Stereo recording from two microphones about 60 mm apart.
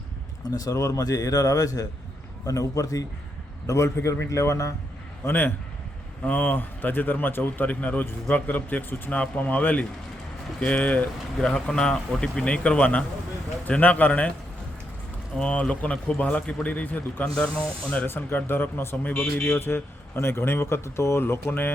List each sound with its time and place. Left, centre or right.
0.5 s speech: left
2.5 s a man's voice: left
5.2 s speech: left
7.7 s a man's voice: left
11.3 s a man's voice: centre
15.4 s a man's voice: left
19.1 s speech: centre
19.5 s a man's voice: left